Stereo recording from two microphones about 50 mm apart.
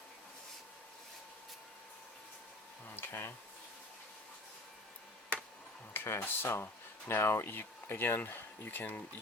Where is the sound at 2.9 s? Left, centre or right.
Left.